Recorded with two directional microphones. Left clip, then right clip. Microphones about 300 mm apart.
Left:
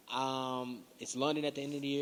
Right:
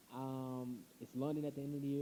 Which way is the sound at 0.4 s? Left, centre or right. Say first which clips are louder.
Left 9 dB; left.